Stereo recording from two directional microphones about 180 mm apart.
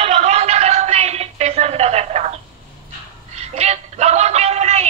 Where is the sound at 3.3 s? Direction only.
35° right (ahead or behind).